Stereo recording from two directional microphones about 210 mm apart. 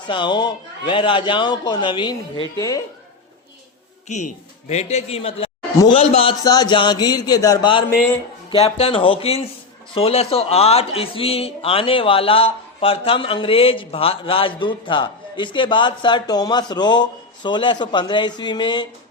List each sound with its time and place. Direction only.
0.1 s a man's voice: 20° left (ahead or behind)
4.1 s a man's voice: 35° left (ahead or behind)